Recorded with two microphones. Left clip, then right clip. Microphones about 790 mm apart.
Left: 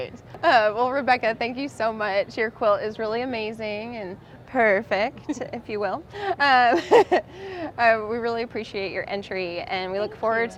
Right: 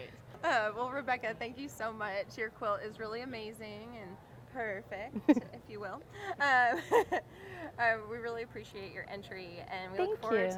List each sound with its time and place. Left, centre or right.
0.0 s a woman's voice: left
5.4 s a woman's voice: left